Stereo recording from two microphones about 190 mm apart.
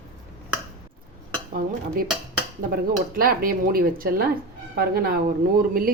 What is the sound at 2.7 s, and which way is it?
Speech, 50° right (ahead or behind).